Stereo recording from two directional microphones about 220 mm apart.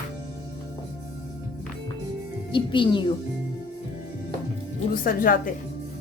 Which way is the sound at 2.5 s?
20° left (ahead or behind).